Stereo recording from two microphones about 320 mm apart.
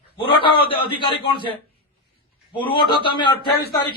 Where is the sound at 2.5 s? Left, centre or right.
Centre.